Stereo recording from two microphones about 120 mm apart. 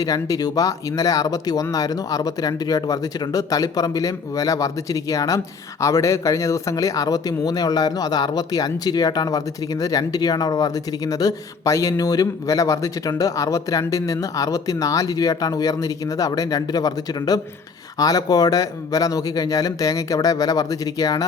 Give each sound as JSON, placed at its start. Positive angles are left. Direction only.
{"t": 0.0, "sound": "speech", "side_deg": 30}